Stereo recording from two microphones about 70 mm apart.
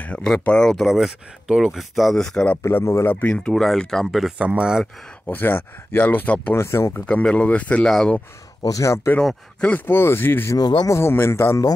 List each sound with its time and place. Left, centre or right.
0.0 s speech: centre
0.8 s speech: centre
2.2 s speech: centre
2.6 s speech: left
3.1 s speech: left
3.3 s speech: centre
4.4 s speech: centre
5.3 s speech: left
6.5 s speech: left
6.9 s speech: centre
7.8 s speech: centre
8.6 s speech: left
9.8 s speech: left